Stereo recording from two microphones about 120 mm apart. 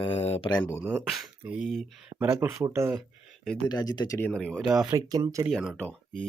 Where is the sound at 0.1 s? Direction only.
60° left (ahead or behind).